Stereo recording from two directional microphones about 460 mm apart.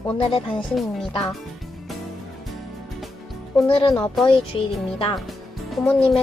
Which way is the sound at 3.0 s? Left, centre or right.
Centre.